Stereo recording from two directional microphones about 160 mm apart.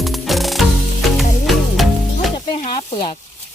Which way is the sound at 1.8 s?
Centre (ahead or behind).